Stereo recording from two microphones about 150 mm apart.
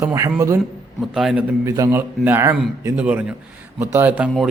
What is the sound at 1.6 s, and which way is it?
A man's voice, 15° right (ahead or behind).